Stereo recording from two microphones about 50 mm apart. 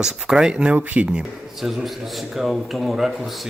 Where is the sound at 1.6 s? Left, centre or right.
Centre.